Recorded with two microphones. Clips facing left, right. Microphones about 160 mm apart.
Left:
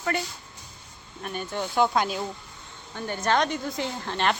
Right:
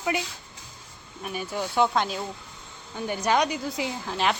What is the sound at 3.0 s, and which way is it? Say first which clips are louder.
Speech: right 1 dB; 10° right (ahead or behind).